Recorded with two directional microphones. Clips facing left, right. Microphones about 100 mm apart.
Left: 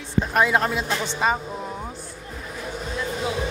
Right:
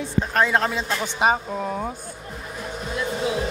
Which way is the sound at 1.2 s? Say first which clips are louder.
Right 5 dB; 65° right (ahead or behind).